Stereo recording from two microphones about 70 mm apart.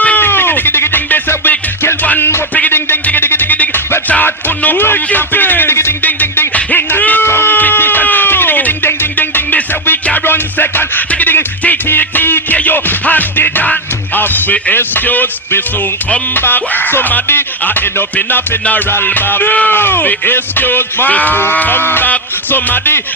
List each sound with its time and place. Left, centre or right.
0.0 s music: left
6.7 s a sound: left
10.2 s music: left